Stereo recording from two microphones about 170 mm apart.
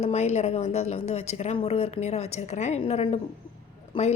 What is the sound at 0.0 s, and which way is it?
A woman's voice, 40° left (ahead or behind).